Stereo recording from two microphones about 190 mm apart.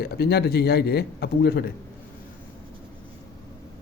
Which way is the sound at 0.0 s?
55° left (ahead or behind).